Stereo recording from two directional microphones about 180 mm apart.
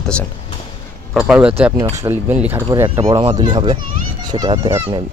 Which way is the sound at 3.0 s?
30° right (ahead or behind).